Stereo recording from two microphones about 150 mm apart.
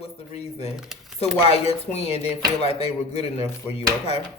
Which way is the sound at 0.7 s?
Centre (ahead or behind).